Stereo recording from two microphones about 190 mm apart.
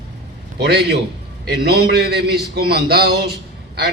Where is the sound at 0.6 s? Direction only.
60° right (ahead or behind).